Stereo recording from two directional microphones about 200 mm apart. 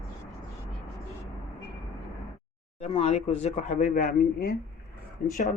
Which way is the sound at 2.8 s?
30° left (ahead or behind).